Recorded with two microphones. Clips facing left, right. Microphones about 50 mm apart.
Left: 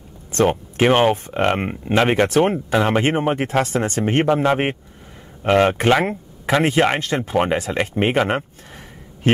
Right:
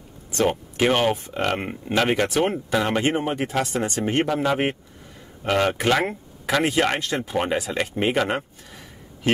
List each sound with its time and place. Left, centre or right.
0.3 s a sound: left
0.7 s speech: left
5.9 s speech: left
7.7 s speech: left